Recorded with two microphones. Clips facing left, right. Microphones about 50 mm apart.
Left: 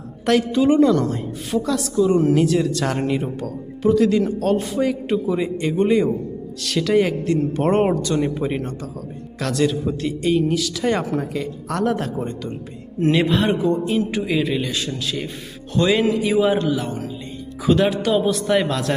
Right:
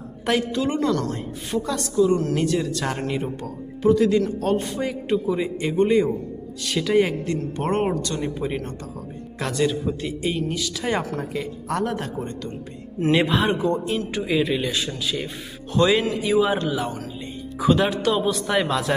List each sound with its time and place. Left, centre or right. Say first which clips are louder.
0.5 s a man's voice: left 7 dB; centre
2.0 s speech: left 4 dB; centre
2.3 s a man's voice: left 5 dB; centre
9.5 s a man's voice: left 3 dB; centre